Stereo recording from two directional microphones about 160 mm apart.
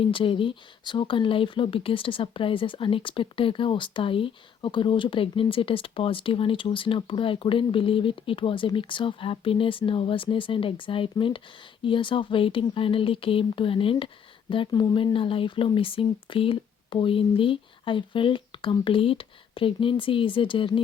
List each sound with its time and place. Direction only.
0.0 s speech: 35° left (ahead or behind)